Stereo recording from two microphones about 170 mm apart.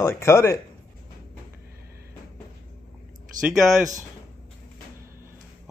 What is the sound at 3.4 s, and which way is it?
Speech, 5° right (ahead or behind).